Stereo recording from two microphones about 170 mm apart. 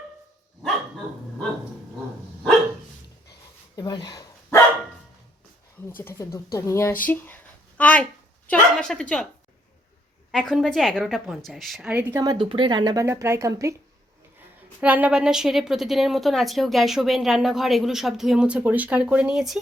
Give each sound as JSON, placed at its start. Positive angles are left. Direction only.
{"t": 3.8, "sound": "speech", "side_deg": 25}
{"t": 5.9, "sound": "a woman's voice", "side_deg": 15}
{"t": 10.3, "sound": "a woman's voice", "side_deg": 5}
{"t": 11.9, "sound": "speech", "side_deg": -10}
{"t": 12.2, "sound": "speech", "side_deg": -25}
{"t": 14.8, "sound": "a woman's voice", "side_deg": -10}